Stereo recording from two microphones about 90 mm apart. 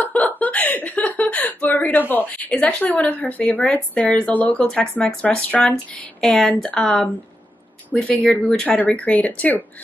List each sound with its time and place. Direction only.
0.0 s speech: 15° left (ahead or behind)